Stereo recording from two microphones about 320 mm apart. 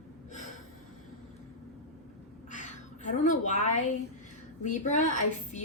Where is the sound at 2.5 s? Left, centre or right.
Left.